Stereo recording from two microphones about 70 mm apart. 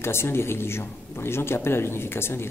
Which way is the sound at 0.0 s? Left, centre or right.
Left.